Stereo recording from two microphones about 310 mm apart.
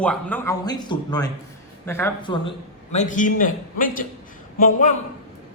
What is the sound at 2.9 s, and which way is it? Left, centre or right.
A man's voice, left.